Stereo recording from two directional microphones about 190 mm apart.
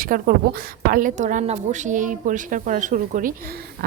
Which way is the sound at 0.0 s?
50° right (ahead or behind).